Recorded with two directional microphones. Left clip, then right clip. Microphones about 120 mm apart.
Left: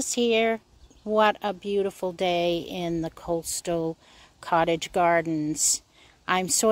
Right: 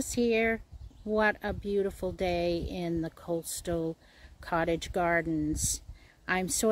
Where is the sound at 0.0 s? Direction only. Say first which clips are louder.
Left 5 dB; 20° left (ahead or behind).